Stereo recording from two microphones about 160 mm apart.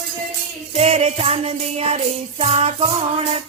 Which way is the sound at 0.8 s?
40° right (ahead or behind).